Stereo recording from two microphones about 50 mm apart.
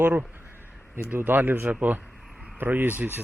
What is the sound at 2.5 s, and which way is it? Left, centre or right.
Speech, right.